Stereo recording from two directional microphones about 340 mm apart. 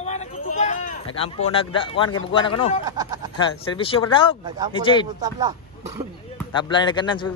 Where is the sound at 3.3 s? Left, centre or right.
Centre.